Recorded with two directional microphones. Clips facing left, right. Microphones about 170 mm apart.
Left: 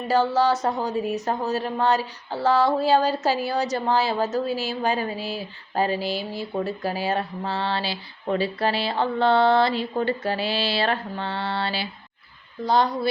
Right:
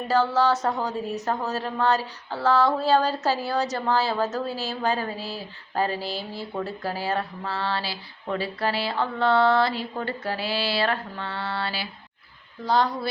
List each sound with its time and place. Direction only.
0.1 s speech: 15° left (ahead or behind)